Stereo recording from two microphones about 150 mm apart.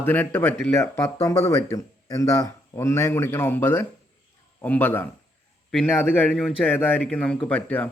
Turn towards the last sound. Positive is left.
turn(degrees=10)  # may be behind; listen again after turning